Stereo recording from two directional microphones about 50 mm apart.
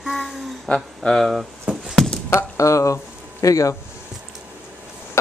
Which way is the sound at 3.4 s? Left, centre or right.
Left.